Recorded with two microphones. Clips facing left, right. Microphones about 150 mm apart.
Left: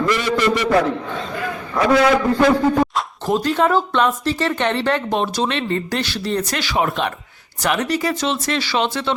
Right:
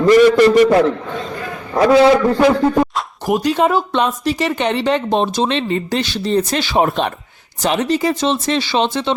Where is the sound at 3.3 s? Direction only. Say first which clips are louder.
Right 2 dB; 15° right (ahead or behind).